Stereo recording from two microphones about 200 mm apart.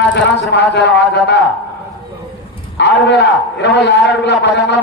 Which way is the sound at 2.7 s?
60° left (ahead or behind).